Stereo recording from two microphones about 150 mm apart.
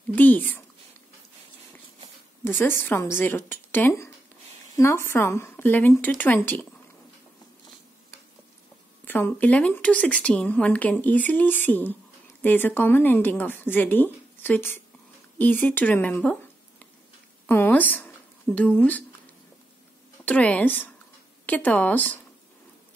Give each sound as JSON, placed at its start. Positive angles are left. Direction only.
{"t": 0.1, "sound": "speech", "side_deg": 10}
{"t": 2.4, "sound": "speech", "side_deg": 15}
{"t": 9.0, "sound": "speech", "side_deg": 15}
{"t": 17.5, "sound": "speech", "side_deg": 15}
{"t": 20.2, "sound": "speech", "side_deg": 10}